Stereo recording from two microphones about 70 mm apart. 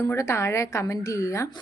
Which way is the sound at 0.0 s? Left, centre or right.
Left.